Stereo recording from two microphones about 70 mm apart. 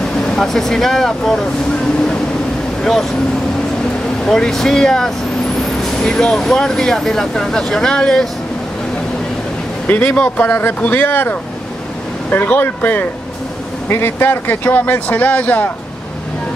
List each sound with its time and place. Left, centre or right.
0.3 s speech: centre
2.8 s speech: centre
4.2 s speech: centre
9.8 s speech: left